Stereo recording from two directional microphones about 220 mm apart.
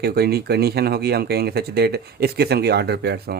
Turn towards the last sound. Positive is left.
turn(degrees=-50)  # may be behind; listen again after turning